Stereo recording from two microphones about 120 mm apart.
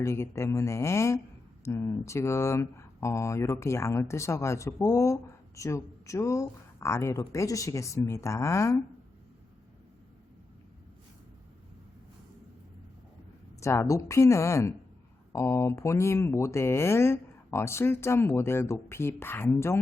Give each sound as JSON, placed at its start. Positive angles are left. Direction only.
{"t": 0.0, "sound": "speech", "side_deg": 25}
{"t": 13.6, "sound": "speech", "side_deg": 25}